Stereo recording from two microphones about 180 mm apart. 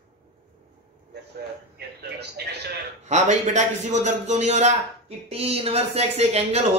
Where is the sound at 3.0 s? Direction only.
40° right (ahead or behind).